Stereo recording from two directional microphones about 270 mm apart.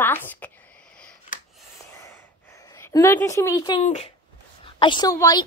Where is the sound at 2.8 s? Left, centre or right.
Centre.